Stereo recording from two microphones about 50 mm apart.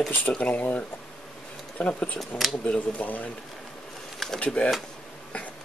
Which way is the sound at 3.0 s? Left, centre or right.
Left.